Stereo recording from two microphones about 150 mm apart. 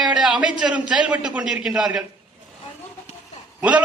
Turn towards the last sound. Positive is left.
turn(degrees=-10)  # may be behind; listen again after turning